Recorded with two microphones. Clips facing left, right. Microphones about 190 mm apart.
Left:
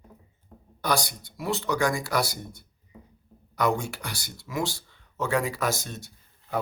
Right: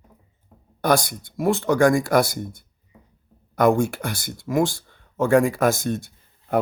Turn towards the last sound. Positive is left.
turn(degrees=-55)  # may be behind; listen again after turning